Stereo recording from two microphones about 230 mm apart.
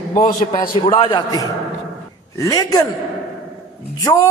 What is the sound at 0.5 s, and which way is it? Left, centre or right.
A man's voice, left.